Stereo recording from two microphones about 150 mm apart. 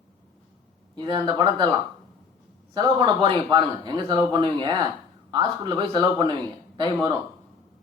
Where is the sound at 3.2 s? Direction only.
30° right (ahead or behind).